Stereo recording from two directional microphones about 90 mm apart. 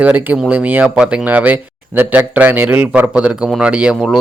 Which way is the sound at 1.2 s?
20° right (ahead or behind).